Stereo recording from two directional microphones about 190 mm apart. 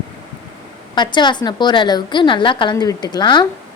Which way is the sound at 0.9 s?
25° left (ahead or behind).